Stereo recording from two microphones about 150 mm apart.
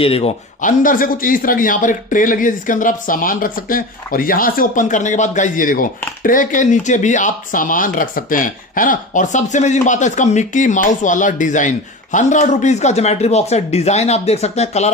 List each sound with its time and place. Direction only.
0.0 s speech: 40° left (ahead or behind)
0.6 s speech: 60° left (ahead or behind); by 14.9 s 45° left (ahead or behind)